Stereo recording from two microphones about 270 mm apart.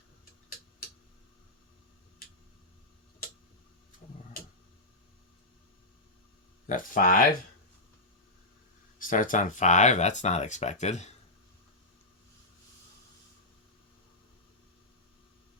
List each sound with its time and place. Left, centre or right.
6.7 s speech: left
9.0 s speech: left